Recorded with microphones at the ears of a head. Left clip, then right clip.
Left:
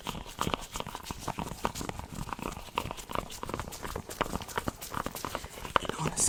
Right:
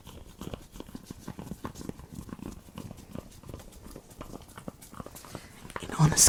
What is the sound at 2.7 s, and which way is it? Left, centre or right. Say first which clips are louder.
Horse: left 12 dB; left.